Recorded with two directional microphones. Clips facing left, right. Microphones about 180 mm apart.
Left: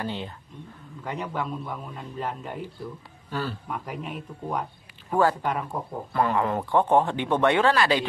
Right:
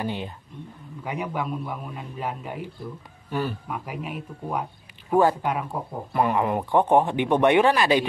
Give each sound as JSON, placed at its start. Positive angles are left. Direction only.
{"t": 0.0, "sound": "speech", "side_deg": -15}